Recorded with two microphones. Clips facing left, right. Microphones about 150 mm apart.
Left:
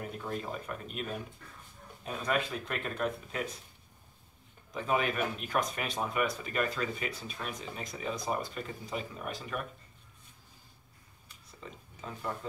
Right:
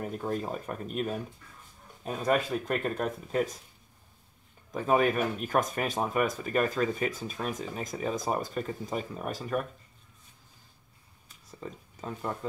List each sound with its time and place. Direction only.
0.0 s speech: 40° right (ahead or behind)
4.7 s speech: 45° right (ahead or behind)